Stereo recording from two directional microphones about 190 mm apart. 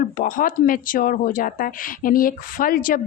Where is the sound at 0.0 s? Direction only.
45° left (ahead or behind).